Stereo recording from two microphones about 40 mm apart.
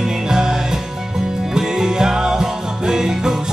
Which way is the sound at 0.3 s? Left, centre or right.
Centre.